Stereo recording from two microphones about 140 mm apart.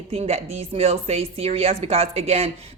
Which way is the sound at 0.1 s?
50° right (ahead or behind).